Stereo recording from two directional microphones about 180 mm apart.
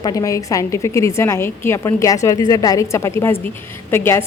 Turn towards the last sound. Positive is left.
turn(degrees=15)  # may be behind; listen again after turning